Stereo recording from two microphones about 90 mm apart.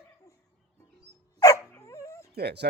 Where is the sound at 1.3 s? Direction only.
40° left (ahead or behind).